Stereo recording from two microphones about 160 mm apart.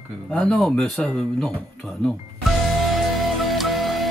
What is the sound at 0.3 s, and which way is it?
Speech, centre (ahead or behind).